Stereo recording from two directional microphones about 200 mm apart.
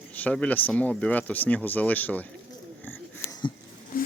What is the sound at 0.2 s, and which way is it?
Speech, 5° left (ahead or behind).